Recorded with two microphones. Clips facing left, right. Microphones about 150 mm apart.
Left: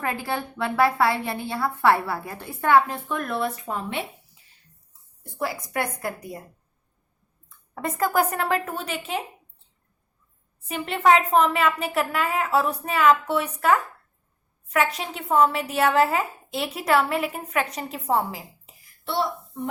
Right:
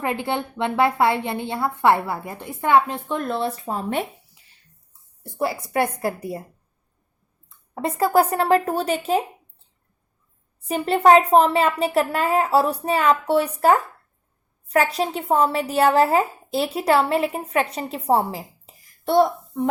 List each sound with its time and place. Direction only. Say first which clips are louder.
0.0 s a woman's voice: right 3 dB; 20° right (ahead or behind); by 4.0 s 40° right (ahead or behind)
4.4 s a sound: right 1 dB; 75° right (ahead or behind)
5.2 s a woman's voice: right 4 dB; 30° right (ahead or behind)
7.7 s speech: right 4 dB; 30° right (ahead or behind)
10.7 s speech: right 5 dB; 35° right (ahead or behind)